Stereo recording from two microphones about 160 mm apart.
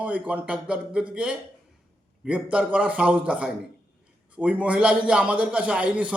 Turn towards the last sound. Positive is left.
turn(degrees=-5)  # may be behind; listen again after turning